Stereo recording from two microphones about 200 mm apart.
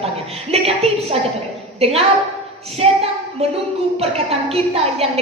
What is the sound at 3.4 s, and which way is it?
A woman's voice, 30° right (ahead or behind).